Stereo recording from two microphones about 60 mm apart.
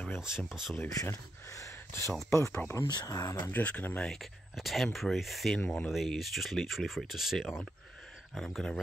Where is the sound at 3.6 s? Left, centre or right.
Left.